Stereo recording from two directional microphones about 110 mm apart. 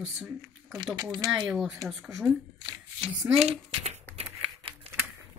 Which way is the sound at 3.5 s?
55° right (ahead or behind).